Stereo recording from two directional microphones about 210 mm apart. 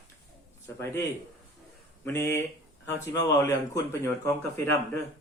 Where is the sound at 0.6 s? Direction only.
15° left (ahead or behind).